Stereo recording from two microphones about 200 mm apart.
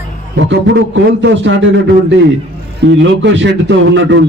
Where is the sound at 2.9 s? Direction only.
60° right (ahead or behind).